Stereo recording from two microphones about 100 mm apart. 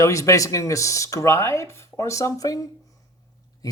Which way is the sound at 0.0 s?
30° left (ahead or behind).